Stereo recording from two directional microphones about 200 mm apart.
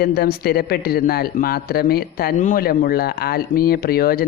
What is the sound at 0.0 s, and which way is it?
Speech, 50° left (ahead or behind).